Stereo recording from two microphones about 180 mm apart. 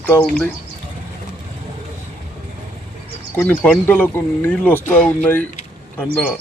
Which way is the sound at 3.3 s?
10° left (ahead or behind).